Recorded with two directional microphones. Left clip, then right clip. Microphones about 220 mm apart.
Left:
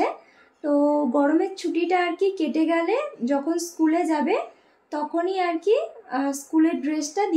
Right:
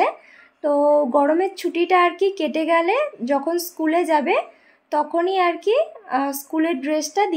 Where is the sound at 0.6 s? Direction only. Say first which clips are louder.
Right 5 dB; 35° right (ahead or behind).